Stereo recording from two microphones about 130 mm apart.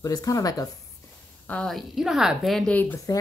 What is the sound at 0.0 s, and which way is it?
Speech, 25° left (ahead or behind).